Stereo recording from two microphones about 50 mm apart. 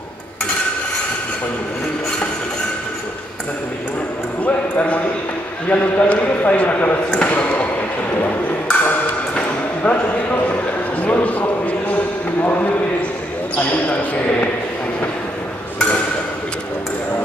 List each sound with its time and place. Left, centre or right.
4.4 s a sound: left
5.7 s a man's voice: left
8.6 s music: left
9.8 s clip-clop: left
11.0 s a sound: left
13.7 s basketball bounce: left